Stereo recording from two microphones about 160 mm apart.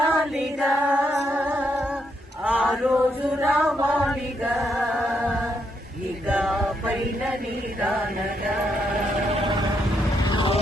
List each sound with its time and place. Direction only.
0.1 s female singing: centre (ahead or behind)
1.2 s music: 10° right (ahead or behind)
2.4 s male singing: 5° right (ahead or behind)
3.4 s choir: centre (ahead or behind)
3.8 s chant: 5° right (ahead or behind)
6.2 s music: 5° right (ahead or behind)
10.2 s vehicle: 30° left (ahead or behind)